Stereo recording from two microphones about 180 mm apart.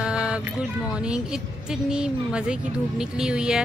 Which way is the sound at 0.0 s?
5° right (ahead or behind).